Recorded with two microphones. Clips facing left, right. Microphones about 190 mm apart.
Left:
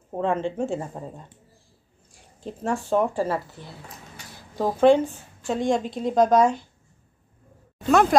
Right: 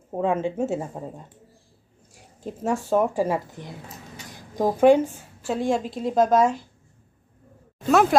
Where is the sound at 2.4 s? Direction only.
10° right (ahead or behind).